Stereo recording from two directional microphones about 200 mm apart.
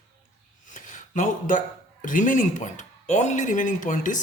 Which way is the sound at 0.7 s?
40° left (ahead or behind).